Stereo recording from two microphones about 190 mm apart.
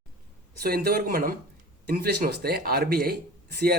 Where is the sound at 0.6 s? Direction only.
55° right (ahead or behind).